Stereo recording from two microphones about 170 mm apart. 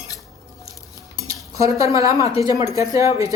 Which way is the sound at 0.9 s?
20° right (ahead or behind).